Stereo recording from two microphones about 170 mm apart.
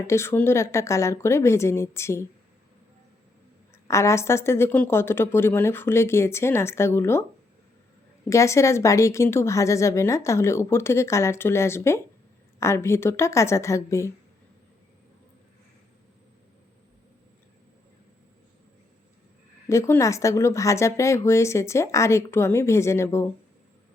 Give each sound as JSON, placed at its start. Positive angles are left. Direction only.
{"t": 0.1, "sound": "speech", "side_deg": 15}
{"t": 3.8, "sound": "speech", "side_deg": 15}
{"t": 8.3, "sound": "speech", "side_deg": 15}
{"t": 19.6, "sound": "speech", "side_deg": 15}